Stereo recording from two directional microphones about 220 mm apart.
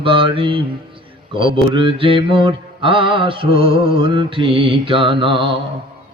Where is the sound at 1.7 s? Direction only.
25° right (ahead or behind).